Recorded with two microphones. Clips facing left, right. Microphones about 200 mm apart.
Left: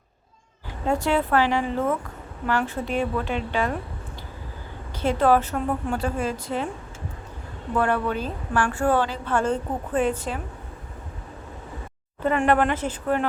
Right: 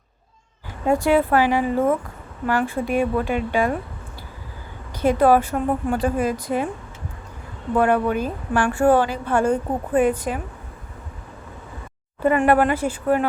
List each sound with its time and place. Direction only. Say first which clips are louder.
0.9 s a woman's voice: right 5 dB; 10° right (ahead or behind)
4.9 s a woman's voice: right 4 dB; 15° right (ahead or behind)
7.8 s a woman's voice: right 5 dB; 15° right (ahead or behind)
12.2 s a woman's voice: right 4 dB; 10° right (ahead or behind)